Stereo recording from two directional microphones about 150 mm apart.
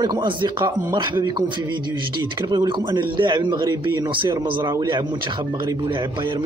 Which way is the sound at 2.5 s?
25° right (ahead or behind).